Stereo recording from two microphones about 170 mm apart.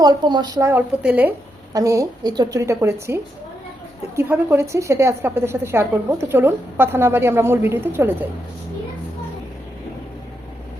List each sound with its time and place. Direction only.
0.0 s a woman's voice: 25° right (ahead or behind)